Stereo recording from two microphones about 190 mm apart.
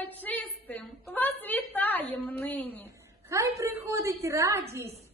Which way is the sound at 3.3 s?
15° right (ahead or behind).